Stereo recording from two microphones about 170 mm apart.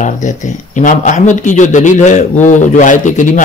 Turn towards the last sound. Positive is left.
turn(degrees=50)  # may be behind; listen again after turning